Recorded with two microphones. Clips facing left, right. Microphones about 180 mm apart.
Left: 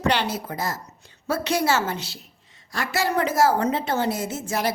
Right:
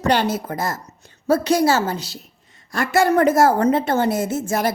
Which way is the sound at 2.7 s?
50° right (ahead or behind).